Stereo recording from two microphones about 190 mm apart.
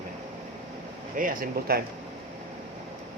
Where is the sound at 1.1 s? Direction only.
45° right (ahead or behind).